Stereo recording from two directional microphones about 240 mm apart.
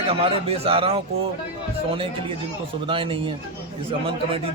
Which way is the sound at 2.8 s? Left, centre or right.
Right.